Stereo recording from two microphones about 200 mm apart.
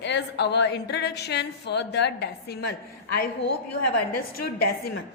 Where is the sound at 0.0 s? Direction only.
60° left (ahead or behind).